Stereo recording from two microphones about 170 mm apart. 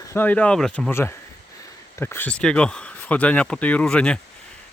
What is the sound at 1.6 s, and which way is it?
Speech, 15° left (ahead or behind).